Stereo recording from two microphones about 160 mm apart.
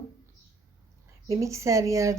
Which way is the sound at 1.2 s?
20° right (ahead or behind).